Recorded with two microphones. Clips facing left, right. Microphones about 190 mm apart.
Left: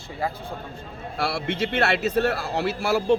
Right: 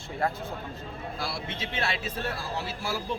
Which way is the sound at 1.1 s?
70° left (ahead or behind).